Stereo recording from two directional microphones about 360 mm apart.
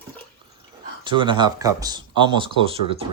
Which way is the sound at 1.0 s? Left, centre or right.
Centre.